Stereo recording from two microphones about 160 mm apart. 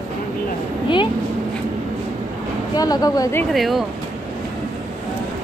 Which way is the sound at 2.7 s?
25° left (ahead or behind).